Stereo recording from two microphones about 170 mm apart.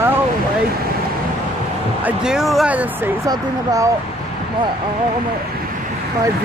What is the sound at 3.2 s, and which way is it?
Speech, 20° right (ahead or behind).